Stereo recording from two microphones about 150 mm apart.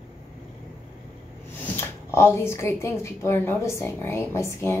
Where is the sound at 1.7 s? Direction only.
15° left (ahead or behind).